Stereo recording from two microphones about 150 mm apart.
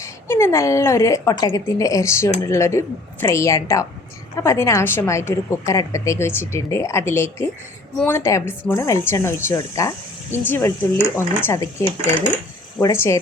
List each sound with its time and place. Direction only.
0.0 s a woman's voice: 15° left (ahead or behind)